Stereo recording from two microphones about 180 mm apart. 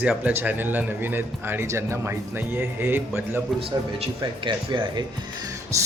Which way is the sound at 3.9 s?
25° right (ahead or behind).